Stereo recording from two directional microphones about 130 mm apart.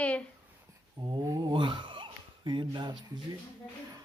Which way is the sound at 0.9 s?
30° right (ahead or behind).